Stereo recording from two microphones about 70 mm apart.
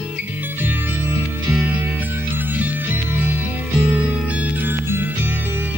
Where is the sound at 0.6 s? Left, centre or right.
Right.